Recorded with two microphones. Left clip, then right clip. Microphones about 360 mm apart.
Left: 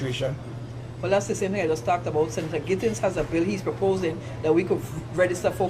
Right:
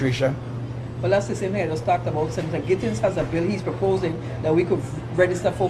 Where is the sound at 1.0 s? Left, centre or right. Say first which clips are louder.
Right 2 dB; left.